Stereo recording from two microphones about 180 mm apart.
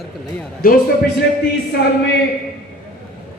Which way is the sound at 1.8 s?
60° left (ahead or behind).